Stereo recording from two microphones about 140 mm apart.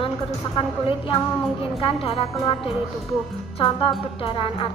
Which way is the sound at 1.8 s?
45° left (ahead or behind).